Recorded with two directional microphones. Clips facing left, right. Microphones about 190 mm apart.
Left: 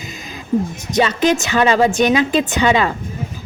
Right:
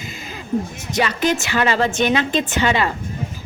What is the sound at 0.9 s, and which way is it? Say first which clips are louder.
A woman's voice: left 4 dB; 20° left (ahead or behind).